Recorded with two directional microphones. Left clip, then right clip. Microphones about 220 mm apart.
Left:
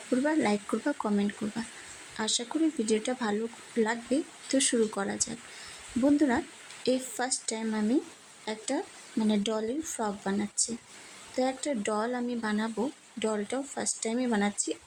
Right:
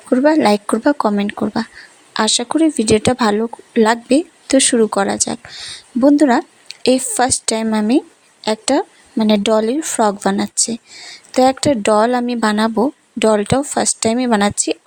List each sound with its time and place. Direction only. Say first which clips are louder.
0.1 s speech: right 15 dB; 40° right (ahead or behind)